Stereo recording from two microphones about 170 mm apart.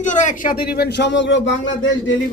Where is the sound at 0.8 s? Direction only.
80° left.